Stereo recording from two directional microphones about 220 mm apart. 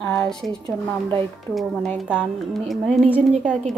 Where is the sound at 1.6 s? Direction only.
Centre (ahead or behind).